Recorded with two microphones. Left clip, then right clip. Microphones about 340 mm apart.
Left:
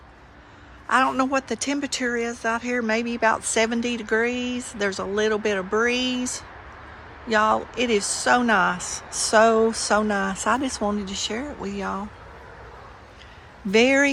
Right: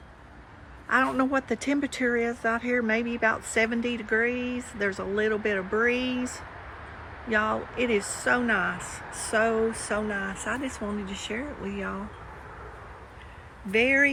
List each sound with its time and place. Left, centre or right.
0.9 s speech: centre
13.7 s speech: centre